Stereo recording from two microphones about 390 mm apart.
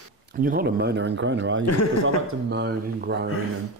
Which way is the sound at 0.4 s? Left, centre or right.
Right.